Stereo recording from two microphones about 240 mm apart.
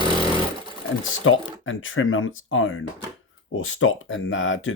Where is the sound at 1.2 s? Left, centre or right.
Left.